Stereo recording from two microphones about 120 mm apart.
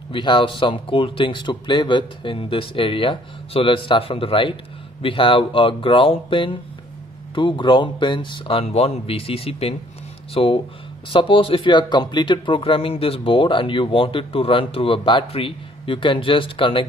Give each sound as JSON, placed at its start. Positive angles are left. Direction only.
{"t": 0.1, "sound": "speech", "side_deg": 40}